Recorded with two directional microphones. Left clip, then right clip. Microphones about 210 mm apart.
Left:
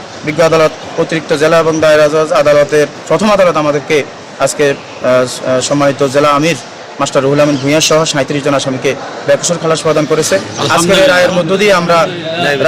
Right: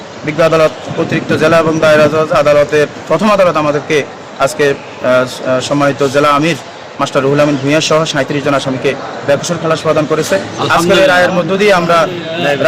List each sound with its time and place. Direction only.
0.3 s a man's voice: 20° left (ahead or behind)